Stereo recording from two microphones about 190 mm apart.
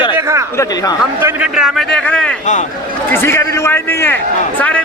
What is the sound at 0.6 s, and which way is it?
Speech, 20° left (ahead or behind).